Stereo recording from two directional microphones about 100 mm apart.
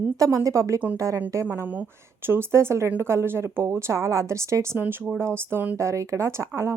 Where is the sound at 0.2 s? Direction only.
30° right (ahead or behind).